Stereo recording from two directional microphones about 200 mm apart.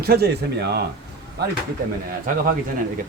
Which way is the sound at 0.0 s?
50° right (ahead or behind).